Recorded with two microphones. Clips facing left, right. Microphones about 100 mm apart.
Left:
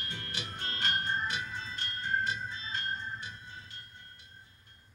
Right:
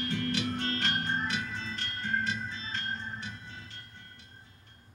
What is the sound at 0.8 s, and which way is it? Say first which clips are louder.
Organ: right 1 dB; 65° right (ahead or behind).